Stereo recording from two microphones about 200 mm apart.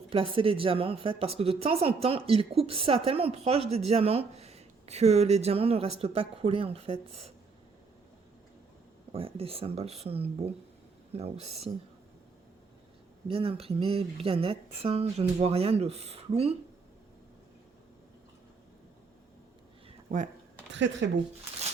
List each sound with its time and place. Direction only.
0.1 s speech: 25° right (ahead or behind)
9.1 s speech: 30° right (ahead or behind)
13.2 s speech: 25° right (ahead or behind)
20.1 s speech: 40° right (ahead or behind)
20.7 s speech: 65° right (ahead or behind)